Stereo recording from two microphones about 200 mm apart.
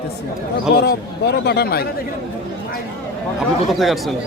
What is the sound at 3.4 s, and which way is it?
Speech, centre (ahead or behind).